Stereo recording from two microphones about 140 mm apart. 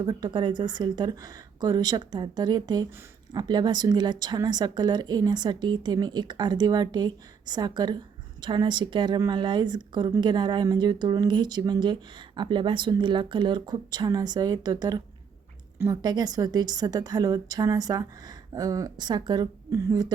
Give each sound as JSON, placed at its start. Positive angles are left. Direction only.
{"t": 0.0, "sound": "a woman's voice", "side_deg": -30}